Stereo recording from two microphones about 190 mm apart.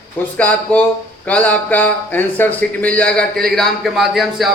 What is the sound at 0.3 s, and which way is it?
A man's voice, 5° left (ahead or behind).